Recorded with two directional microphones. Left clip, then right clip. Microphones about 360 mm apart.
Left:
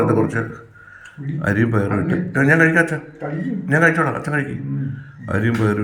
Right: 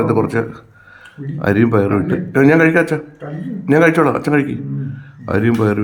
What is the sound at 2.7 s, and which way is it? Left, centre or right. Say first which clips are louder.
Speech: right 2 dB; right.